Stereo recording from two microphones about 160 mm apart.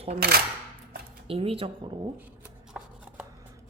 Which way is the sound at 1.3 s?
35° right (ahead or behind).